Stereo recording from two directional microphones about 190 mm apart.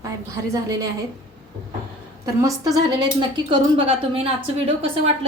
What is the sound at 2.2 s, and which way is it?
A woman's voice, 15° right (ahead or behind).